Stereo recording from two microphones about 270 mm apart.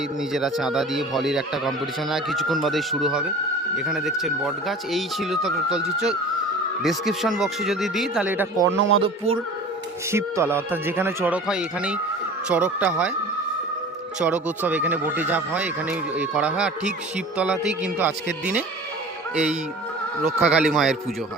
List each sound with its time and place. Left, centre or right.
0.3 s a man's voice: centre
8.7 s speech: right
9.0 s speech: right
10.1 s a man's voice: centre
14.2 s a man's voice: centre
20.2 s a man's voice: centre